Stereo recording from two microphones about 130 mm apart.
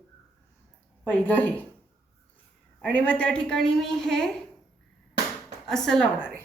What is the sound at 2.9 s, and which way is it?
A woman's voice, 10° left (ahead or behind).